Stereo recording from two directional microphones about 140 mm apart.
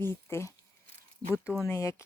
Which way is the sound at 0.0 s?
20° left (ahead or behind).